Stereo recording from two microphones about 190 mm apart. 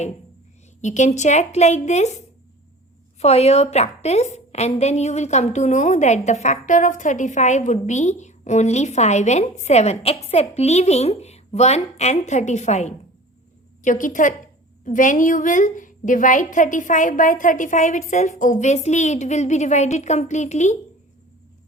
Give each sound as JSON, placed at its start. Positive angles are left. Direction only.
{"t": 0.8, "sound": "a woman's voice", "side_deg": 40}